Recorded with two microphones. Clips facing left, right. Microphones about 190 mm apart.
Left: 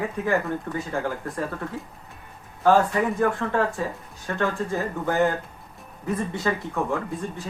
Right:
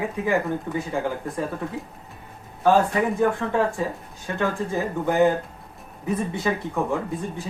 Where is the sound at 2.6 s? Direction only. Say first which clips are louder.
Even; 15° right (ahead or behind).